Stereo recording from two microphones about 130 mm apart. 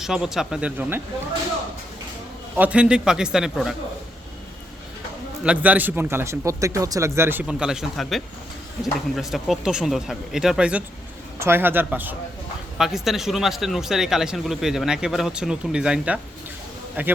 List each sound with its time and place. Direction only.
0.0 s speech: 5° right (ahead or behind)
2.6 s speech: 10° right (ahead or behind)
5.5 s speech: 10° right (ahead or behind)
12.7 s speech: centre (ahead or behind)